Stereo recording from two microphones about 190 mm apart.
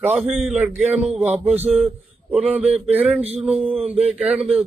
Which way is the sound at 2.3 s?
5° right (ahead or behind).